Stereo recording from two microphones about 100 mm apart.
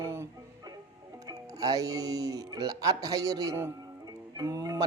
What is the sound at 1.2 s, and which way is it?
A man's voice, 40° right (ahead or behind).